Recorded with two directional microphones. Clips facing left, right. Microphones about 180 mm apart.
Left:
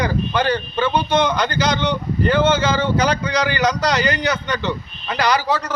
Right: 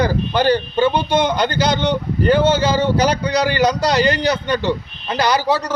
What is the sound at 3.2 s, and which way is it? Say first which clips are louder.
A man's voice: right 3 dB; 35° right (ahead or behind).